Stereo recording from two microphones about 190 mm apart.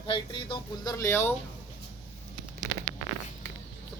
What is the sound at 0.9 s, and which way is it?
Speech, 15° left (ahead or behind).